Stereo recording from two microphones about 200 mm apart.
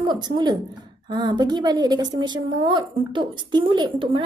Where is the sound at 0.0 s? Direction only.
20° right (ahead or behind).